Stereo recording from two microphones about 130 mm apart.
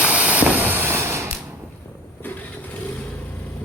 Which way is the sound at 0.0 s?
10° right (ahead or behind).